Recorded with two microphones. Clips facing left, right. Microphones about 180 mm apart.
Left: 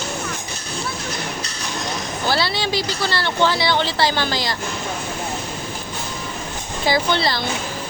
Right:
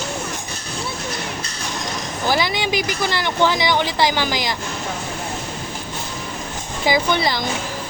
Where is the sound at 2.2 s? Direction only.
15° right (ahead or behind).